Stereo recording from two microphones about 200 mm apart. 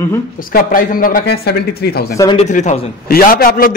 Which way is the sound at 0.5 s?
45° left (ahead or behind).